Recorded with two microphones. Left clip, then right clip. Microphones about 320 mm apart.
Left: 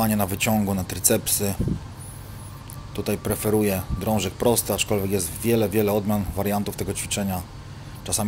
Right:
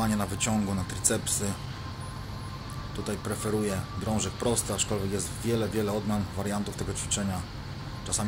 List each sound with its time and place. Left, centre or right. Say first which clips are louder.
0.0 s speech: left 6 dB; centre
3.0 s speech: left 8 dB; centre